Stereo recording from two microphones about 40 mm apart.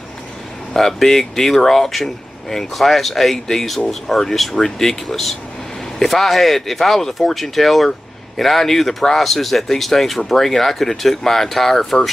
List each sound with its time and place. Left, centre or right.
0.7 s speech: centre